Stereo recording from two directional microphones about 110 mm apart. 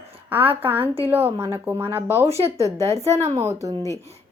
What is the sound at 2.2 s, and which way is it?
Speech, 65° right (ahead or behind).